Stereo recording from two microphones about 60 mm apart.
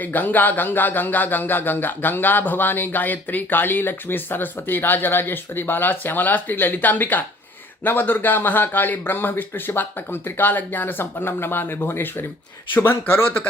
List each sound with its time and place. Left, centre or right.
0.0 s speech: left